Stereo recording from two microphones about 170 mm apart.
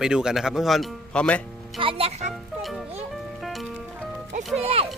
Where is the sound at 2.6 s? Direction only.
Centre (ahead or behind).